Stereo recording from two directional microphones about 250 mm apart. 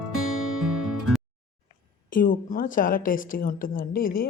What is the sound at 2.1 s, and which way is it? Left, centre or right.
A woman's voice, left.